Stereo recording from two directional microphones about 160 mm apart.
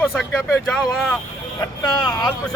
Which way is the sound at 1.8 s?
25° left (ahead or behind).